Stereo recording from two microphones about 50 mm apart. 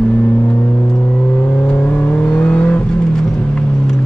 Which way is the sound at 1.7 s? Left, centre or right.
Left.